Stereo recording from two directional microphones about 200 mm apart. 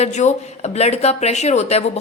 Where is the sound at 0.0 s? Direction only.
35° left (ahead or behind).